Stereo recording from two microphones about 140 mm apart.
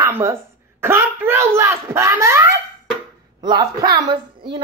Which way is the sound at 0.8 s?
20° right (ahead or behind).